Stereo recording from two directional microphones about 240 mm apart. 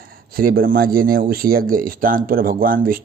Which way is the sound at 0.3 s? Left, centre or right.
Right.